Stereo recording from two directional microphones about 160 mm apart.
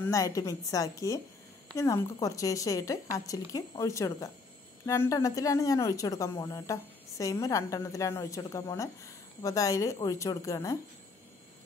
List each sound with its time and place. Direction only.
0.0 s speech: 20° left (ahead or behind)